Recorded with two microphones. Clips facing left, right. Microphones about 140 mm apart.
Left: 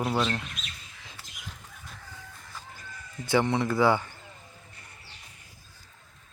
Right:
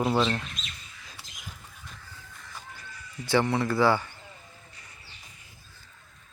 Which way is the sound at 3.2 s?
20° left (ahead or behind).